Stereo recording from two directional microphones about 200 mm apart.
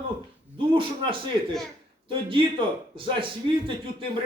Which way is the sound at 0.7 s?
25° right (ahead or behind).